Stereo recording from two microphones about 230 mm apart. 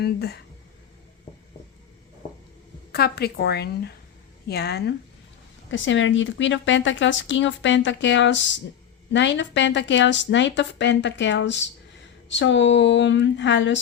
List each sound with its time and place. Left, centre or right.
0.0 s speech: left
2.9 s speech: left